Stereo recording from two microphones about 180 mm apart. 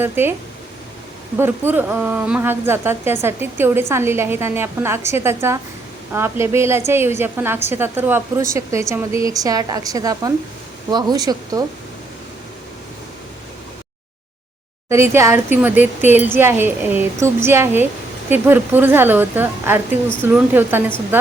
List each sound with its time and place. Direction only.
0.0 s a woman's voice: 10° right (ahead or behind)
1.4 s a woman's voice: 10° right (ahead or behind)
14.8 s a woman's voice: 15° right (ahead or behind)